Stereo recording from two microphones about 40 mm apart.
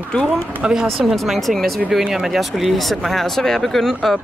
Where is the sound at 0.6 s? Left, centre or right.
Right.